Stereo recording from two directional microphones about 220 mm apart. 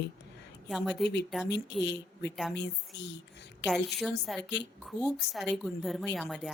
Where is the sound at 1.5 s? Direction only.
50° left (ahead or behind).